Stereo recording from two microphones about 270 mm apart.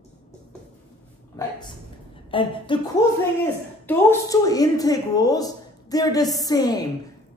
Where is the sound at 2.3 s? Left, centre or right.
Centre.